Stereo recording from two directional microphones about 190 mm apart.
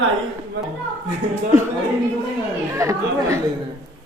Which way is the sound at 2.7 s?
15° right (ahead or behind).